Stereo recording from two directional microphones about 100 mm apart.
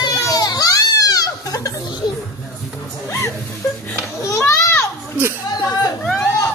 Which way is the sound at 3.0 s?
25° left (ahead or behind).